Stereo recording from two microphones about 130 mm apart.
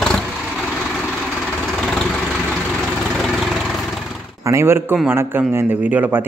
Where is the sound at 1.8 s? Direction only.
5° left (ahead or behind).